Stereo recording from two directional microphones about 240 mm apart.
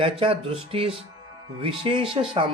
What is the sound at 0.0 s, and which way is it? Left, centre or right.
Speech, right.